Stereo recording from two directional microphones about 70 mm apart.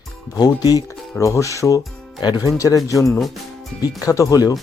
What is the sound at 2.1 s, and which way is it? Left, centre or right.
Speech, left.